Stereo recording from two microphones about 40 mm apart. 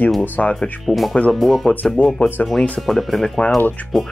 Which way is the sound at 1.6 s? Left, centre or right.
Left.